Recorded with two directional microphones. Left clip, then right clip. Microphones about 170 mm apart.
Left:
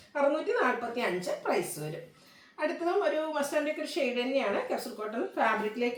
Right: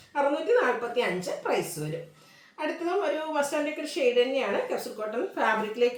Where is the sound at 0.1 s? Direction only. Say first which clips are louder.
Right 4 dB; 15° right (ahead or behind).